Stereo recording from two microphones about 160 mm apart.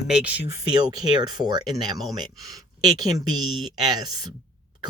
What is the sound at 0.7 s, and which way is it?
Speech, 25° right (ahead or behind).